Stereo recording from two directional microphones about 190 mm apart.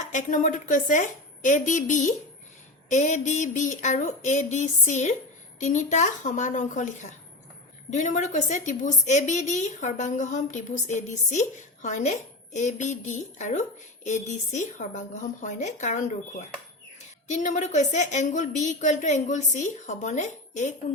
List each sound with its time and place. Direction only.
0.1 s a woman's voice: 40° left (ahead or behind)